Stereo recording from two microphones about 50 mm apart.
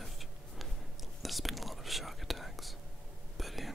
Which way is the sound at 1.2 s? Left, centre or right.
Centre.